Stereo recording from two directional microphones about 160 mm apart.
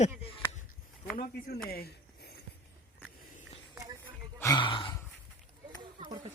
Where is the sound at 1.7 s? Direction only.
85° left.